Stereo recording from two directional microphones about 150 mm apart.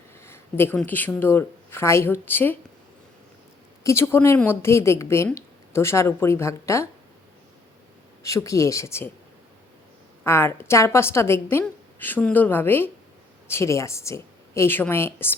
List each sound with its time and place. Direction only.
0.3 s a sound: 15° left (ahead or behind)
0.8 s a woman's voice: 10° left (ahead or behind)
3.8 s a woman's voice: 15° left (ahead or behind)
8.2 s speech: 20° left (ahead or behind)
10.2 s a woman's voice: 15° left (ahead or behind)